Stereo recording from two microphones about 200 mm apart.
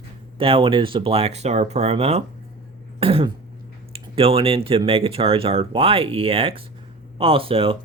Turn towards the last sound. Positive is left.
turn(degrees=-30)  # may be behind; listen again after turning